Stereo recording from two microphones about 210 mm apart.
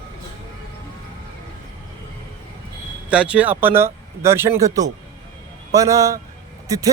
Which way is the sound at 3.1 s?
5° right (ahead or behind).